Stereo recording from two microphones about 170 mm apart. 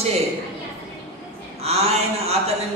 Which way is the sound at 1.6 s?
35° right (ahead or behind).